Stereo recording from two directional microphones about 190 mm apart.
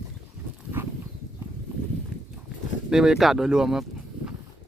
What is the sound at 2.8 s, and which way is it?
Speech, 5° right (ahead or behind).